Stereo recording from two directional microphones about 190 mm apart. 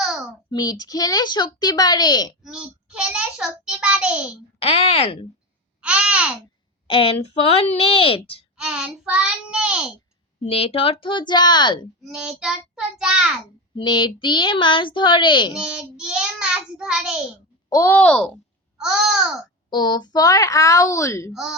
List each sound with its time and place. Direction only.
0.5 s a woman's voice: 20° left (ahead or behind)
2.4 s a child's voice: 5° right (ahead or behind)
4.6 s speech: 30° left (ahead or behind)
5.8 s a child's voice: 5° right (ahead or behind)
6.8 s a woman's voice: 30° left (ahead or behind)
8.5 s a child's voice: 5° right (ahead or behind)
10.4 s a woman's voice: 30° left (ahead or behind)
12.0 s a child's voice: 5° right (ahead or behind)
13.7 s a woman's voice: 25° left (ahead or behind)
15.5 s a child's voice: 5° right (ahead or behind)
17.7 s a child's voice: 15° left (ahead or behind); by 19.3 s 5° right (ahead or behind)
19.7 s speech: 20° left (ahead or behind)